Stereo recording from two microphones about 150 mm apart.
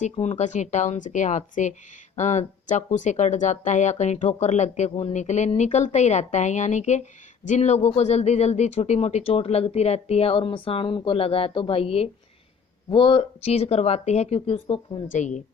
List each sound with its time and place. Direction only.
0.0 s speech: 50° left (ahead or behind)
15.1 s speech: 55° left (ahead or behind)